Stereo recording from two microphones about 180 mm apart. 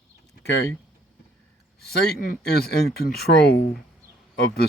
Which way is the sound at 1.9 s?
55° left (ahead or behind).